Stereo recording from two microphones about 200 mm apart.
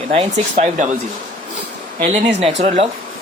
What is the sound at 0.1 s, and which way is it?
Speech, 30° right (ahead or behind).